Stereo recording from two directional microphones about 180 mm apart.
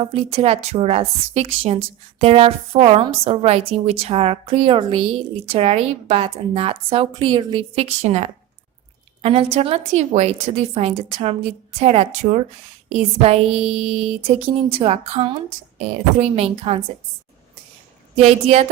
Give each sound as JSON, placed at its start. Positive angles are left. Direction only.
{"t": 0.0, "sound": "a woman's voice", "side_deg": -35}
{"t": 18.2, "sound": "a woman's voice", "side_deg": -35}